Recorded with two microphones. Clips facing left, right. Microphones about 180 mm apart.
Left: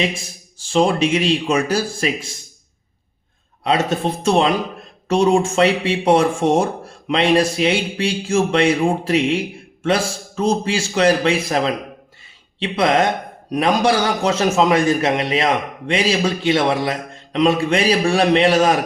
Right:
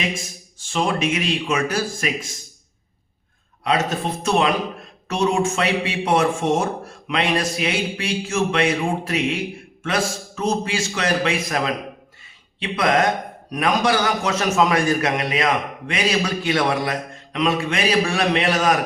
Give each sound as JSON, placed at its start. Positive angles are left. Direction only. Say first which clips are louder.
{"t": 0.6, "sound": "speech", "louder": "left 6 dB", "side_deg": 30}
{"t": 3.6, "sound": "a man's voice", "louder": "left 3 dB", "side_deg": 30}